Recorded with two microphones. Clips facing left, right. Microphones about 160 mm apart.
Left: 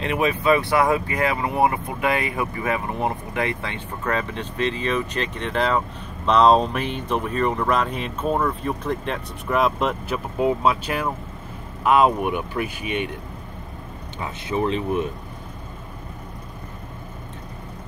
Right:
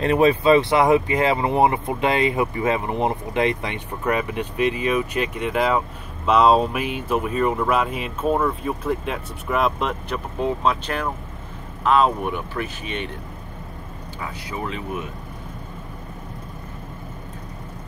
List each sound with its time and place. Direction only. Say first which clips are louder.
0.0 s speech: right 5 dB; 35° right (ahead or behind); by 13.1 s 10° left (ahead or behind)
14.2 s speech: left 6 dB; 25° left (ahead or behind)